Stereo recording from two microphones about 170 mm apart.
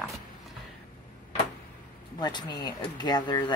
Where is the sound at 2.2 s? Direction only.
25° left (ahead or behind).